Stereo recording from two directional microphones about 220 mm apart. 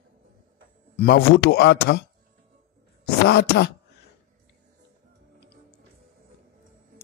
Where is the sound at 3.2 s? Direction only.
50° left (ahead or behind).